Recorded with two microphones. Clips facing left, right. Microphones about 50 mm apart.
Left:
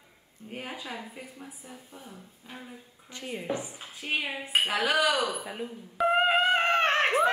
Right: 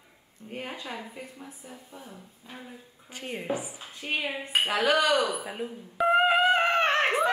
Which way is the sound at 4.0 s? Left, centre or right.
Centre.